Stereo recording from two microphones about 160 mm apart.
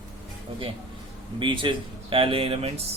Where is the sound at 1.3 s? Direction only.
30° right (ahead or behind).